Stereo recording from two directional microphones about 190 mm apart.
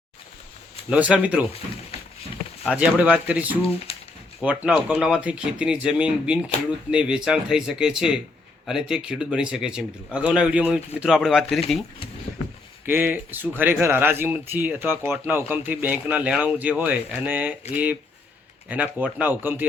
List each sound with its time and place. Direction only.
0.9 s speech: 5° right (ahead or behind)
2.6 s speech: 5° right (ahead or behind)
3.9 s a sound: 30° left (ahead or behind)
4.4 s speech: 5° right (ahead or behind)
12.8 s speech: 10° right (ahead or behind)
18.7 s speech: 10° right (ahead or behind)